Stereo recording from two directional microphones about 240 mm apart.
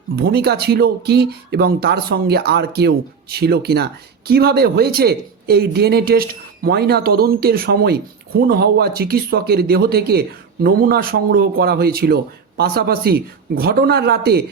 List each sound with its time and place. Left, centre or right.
0.2 s speech: right